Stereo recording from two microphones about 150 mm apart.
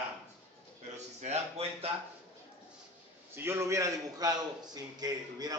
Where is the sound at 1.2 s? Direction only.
45° right (ahead or behind).